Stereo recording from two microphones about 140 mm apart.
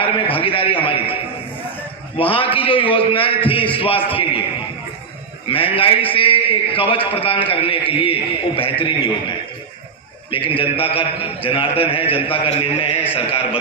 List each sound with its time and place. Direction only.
0.0 s a man's voice: 40° left (ahead or behind)
5.5 s a man's voice: 40° left (ahead or behind)
10.3 s a man's voice: 40° left (ahead or behind)
13.1 s a sound: 40° left (ahead or behind)